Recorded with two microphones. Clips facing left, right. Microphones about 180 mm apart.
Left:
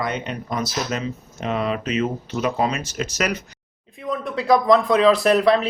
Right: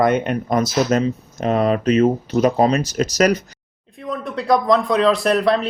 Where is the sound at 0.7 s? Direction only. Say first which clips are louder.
Right 8 dB; 40° right (ahead or behind).